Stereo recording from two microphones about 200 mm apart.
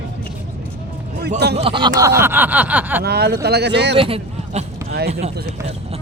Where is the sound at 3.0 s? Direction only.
55° right (ahead or behind).